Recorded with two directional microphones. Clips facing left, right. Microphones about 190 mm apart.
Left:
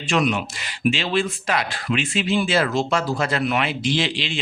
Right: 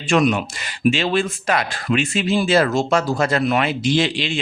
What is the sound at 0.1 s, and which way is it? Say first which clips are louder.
Speech: right 4 dB; 45° right (ahead or behind).